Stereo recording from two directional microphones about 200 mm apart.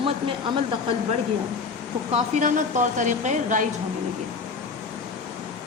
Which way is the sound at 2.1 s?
40° right (ahead or behind).